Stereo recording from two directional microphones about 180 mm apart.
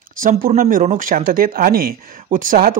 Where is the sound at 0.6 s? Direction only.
50° right (ahead or behind).